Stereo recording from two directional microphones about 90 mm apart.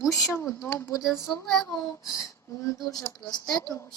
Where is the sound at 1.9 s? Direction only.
40° left (ahead or behind).